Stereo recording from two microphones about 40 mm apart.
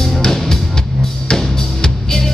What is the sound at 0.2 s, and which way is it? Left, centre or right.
Music, centre.